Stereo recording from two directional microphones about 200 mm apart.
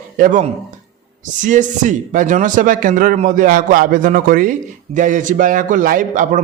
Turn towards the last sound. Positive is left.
turn(degrees=-40)  # may be behind; listen again after turning